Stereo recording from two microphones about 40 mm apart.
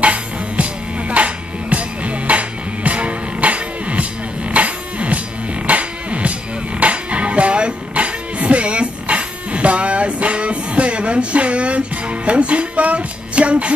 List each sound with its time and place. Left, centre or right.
0.0 s music: right